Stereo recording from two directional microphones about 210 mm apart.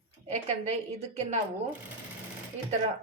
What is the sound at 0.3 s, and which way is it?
A woman's voice, 35° right (ahead or behind).